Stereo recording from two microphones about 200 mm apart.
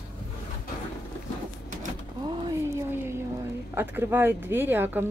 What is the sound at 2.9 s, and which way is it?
A woman's voice, 10° right (ahead or behind).